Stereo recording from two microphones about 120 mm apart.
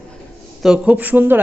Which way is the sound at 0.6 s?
10° right (ahead or behind).